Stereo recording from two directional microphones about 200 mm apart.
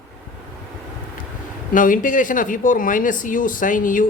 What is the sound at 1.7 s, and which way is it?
A man's voice, 40° left (ahead or behind).